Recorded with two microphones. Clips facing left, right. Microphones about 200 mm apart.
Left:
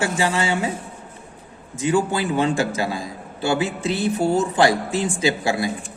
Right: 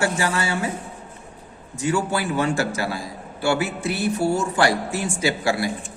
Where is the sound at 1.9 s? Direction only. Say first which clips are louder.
Left 3 dB; 20° left (ahead or behind).